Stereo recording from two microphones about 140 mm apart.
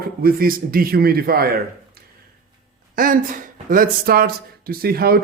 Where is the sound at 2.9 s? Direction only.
80° right.